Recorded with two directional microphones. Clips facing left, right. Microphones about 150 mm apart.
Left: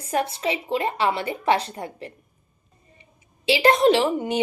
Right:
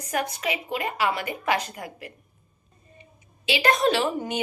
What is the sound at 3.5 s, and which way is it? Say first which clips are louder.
Speech: left 5 dB; 25° left (ahead or behind).